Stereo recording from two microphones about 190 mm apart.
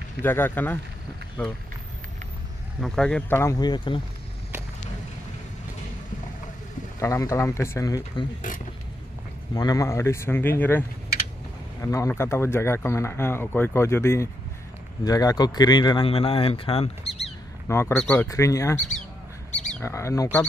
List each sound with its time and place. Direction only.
0.2 s speech: 10° left (ahead or behind)
2.8 s speech: 5° left (ahead or behind); by 4.0 s 25° left (ahead or behind)
7.0 s speech: 15° left (ahead or behind)
9.5 s a man's voice: 20° left (ahead or behind)
17.6 s speech: 10° left (ahead or behind)
19.5 s bird: 10° left (ahead or behind)